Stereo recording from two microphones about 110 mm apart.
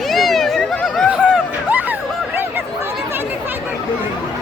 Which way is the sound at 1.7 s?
15° right (ahead or behind).